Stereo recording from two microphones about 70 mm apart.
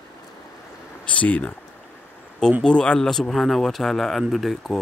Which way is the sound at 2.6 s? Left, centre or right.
Centre.